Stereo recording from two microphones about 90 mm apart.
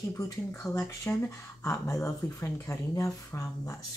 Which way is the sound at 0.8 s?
30° left (ahead or behind).